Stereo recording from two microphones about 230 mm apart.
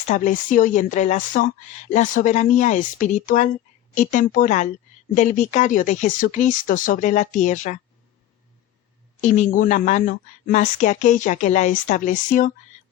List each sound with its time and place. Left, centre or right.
0.0 s a woman's voice: left
9.2 s a woman's voice: left